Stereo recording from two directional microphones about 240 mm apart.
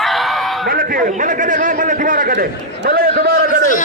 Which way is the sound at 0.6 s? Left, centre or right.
Right.